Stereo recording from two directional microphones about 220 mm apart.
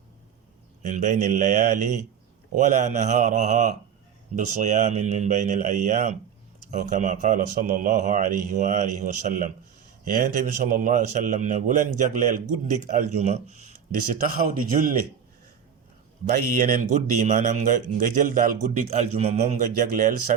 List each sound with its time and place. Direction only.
0.8 s a man's voice: 35° right (ahead or behind)
16.6 s a man's voice: 40° right (ahead or behind)